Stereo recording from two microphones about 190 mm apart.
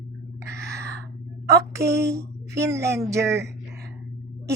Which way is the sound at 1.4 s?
15° right (ahead or behind).